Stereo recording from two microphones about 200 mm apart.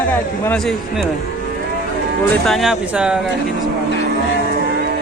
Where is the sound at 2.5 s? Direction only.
Centre (ahead or behind).